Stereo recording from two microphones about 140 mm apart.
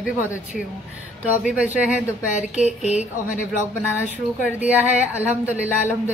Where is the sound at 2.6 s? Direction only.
55° left (ahead or behind).